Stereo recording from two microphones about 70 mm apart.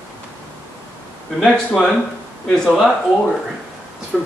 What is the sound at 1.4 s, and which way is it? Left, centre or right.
Speech, centre.